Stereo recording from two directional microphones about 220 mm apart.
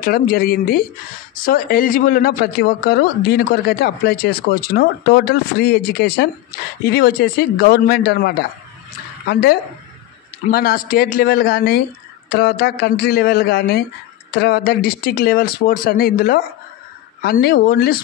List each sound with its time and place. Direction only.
0.0 s speech: 40° left (ahead or behind)